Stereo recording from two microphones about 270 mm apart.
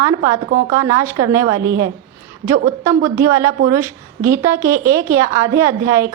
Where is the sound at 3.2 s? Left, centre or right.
Centre.